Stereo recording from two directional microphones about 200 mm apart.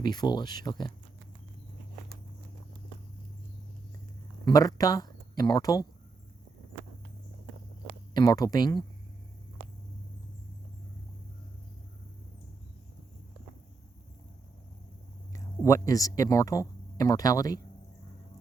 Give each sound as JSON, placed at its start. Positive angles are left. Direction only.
{"t": 0.0, "sound": "speech", "side_deg": 20}
{"t": 4.4, "sound": "speech", "side_deg": 15}
{"t": 8.1, "sound": "speech", "side_deg": 20}
{"t": 15.3, "sound": "speech", "side_deg": 15}